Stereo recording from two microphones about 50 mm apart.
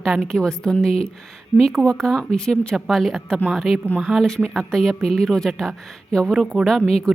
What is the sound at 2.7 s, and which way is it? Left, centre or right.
A woman's voice, centre.